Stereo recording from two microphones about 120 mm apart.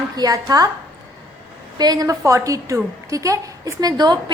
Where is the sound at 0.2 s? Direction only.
30° right (ahead or behind).